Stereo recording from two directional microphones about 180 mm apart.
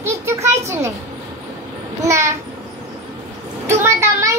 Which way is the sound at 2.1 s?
15° right (ahead or behind).